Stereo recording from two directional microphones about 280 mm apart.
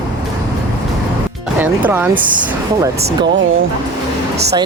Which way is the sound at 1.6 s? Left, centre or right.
Centre.